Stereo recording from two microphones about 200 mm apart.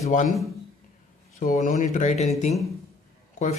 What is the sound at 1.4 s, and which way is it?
Speech, 40° left (ahead or behind).